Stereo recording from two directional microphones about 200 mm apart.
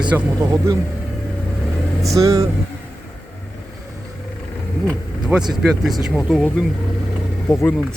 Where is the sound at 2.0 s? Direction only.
15° right (ahead or behind).